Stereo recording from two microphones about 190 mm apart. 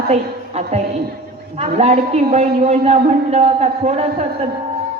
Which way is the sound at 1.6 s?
35° right (ahead or behind).